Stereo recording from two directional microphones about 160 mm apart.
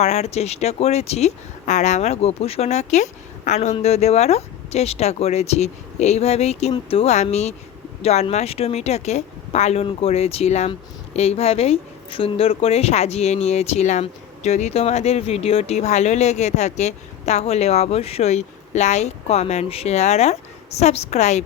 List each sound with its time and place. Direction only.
0.0 s a woman's voice: 45° left (ahead or behind)